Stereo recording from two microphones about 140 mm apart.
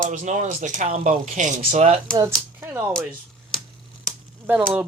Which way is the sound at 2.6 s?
15° right (ahead or behind).